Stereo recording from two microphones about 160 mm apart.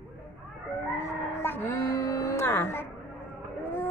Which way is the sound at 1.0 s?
15° left (ahead or behind).